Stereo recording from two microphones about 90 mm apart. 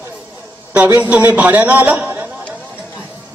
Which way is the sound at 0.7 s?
20° right (ahead or behind).